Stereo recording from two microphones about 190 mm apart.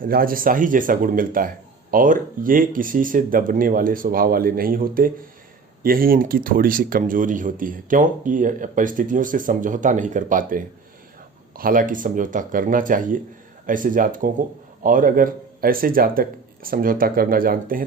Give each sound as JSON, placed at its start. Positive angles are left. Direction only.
{"t": 0.0, "sound": "speech", "side_deg": -50}